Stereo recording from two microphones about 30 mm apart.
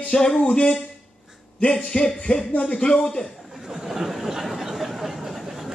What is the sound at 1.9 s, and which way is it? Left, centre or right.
Speech, left.